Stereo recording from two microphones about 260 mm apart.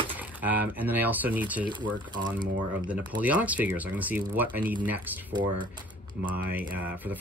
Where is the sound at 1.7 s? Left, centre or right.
Centre.